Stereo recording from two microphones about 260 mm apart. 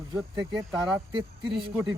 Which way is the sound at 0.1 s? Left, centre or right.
Centre.